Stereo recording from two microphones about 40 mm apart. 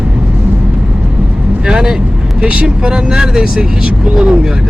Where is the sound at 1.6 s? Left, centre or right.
Centre.